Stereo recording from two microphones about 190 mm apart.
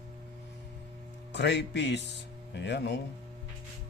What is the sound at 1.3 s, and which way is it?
Speech, 65° left (ahead or behind).